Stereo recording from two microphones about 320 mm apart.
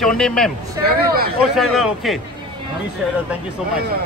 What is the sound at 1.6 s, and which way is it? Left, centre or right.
Speech, centre.